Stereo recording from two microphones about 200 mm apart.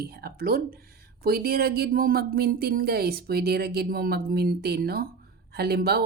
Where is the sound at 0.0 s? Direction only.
50° right (ahead or behind).